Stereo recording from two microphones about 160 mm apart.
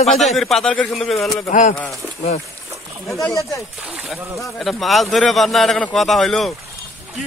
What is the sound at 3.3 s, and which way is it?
Speech, 20° left (ahead or behind).